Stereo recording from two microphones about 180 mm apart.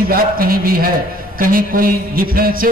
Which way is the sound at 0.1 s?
55° right (ahead or behind).